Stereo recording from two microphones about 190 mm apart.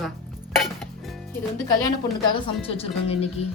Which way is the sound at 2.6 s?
30° left (ahead or behind).